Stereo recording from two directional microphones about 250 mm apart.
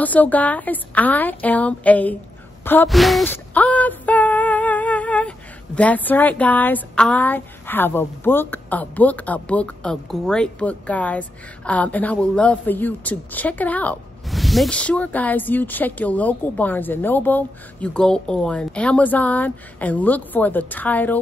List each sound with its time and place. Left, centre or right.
0.0 s a woman's voice: centre
2.6 s a sound: centre
5.8 s a woman's voice: centre